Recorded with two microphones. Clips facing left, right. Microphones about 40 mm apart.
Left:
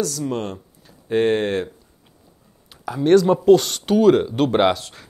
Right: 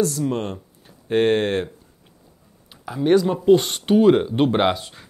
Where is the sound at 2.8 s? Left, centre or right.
Centre.